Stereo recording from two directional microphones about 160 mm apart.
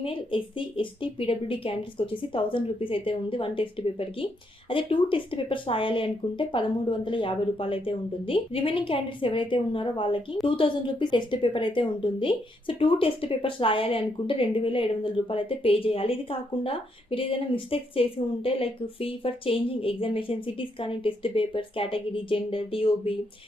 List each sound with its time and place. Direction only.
0.0 s a woman's voice: 35° left (ahead or behind)